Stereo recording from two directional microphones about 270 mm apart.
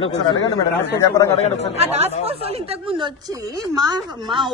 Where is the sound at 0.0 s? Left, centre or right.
Centre.